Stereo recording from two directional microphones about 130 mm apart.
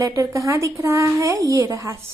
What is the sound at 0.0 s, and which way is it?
A woman's voice, 25° right (ahead or behind).